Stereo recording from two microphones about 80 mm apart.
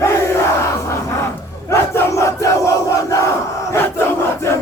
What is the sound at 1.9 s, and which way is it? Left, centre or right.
Crowd, left.